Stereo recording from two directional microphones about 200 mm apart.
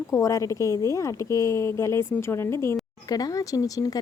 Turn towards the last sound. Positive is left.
turn(degrees=20)  # may be behind; listen again after turning